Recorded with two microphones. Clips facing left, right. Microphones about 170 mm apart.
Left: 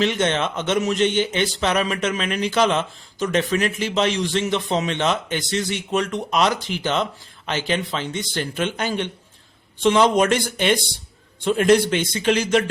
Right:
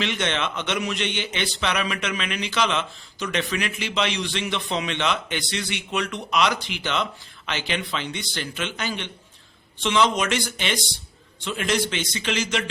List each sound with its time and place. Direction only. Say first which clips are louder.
0.0 s a man's voice: left 5 dB; 40° left (ahead or behind)